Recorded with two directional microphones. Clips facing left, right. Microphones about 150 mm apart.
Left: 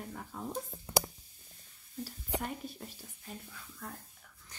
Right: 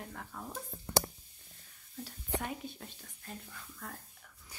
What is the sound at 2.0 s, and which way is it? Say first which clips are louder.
Speech: left 1 dB; centre (ahead or behind).